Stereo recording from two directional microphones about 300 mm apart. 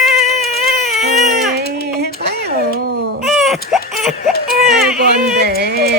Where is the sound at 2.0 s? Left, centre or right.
Right.